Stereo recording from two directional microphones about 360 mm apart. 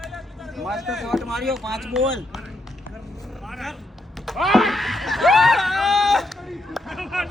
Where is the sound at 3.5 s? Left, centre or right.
Centre.